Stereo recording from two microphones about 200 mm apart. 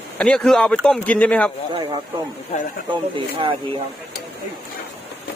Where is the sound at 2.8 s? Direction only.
25° right (ahead or behind).